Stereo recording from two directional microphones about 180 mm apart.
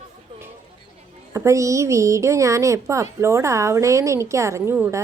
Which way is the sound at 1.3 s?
15° right (ahead or behind).